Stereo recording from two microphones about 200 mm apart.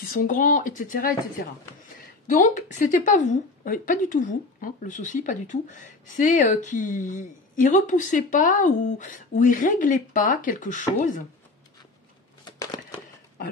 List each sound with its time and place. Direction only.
0.1 s speech: 45° left (ahead or behind)
2.2 s a woman's voice: 40° left (ahead or behind)
12.4 s a sound: 20° left (ahead or behind)